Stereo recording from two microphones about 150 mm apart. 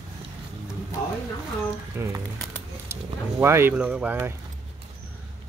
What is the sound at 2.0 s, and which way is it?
Speech, 20° right (ahead or behind).